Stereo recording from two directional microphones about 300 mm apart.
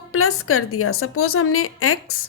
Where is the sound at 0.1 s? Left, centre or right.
Left.